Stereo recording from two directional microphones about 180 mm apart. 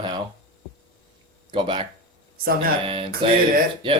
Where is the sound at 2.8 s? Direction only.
30° right (ahead or behind).